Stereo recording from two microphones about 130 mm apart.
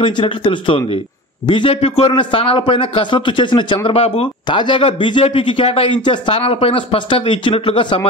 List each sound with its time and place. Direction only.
0.0 s a man's voice: 40° left (ahead or behind)